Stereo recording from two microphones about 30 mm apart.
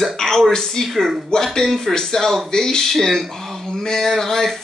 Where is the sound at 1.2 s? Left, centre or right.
Centre.